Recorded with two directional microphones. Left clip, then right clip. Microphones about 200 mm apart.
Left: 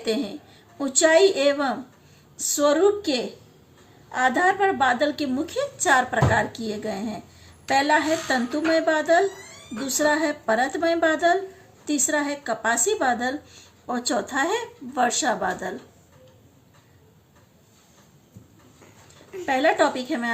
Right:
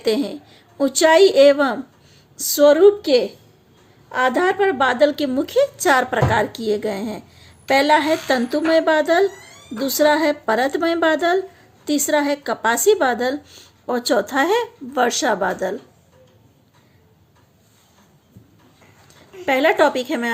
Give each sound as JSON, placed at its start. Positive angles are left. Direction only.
{"t": 0.0, "sound": "a woman's voice", "side_deg": -50}
{"t": 19.5, "sound": "speech", "side_deg": -50}